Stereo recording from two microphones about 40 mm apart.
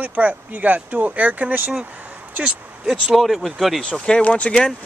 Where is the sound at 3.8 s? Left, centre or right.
Left.